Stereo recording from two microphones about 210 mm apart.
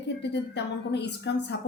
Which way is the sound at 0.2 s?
55° left (ahead or behind).